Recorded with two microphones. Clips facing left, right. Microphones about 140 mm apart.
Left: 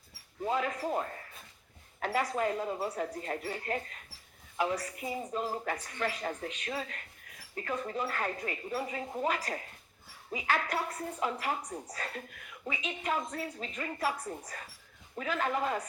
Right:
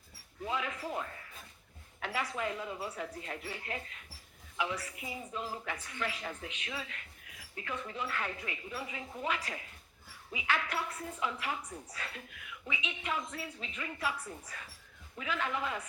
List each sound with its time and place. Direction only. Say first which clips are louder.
0.4 s a woman's voice: left 5 dB; 40° left (ahead or behind)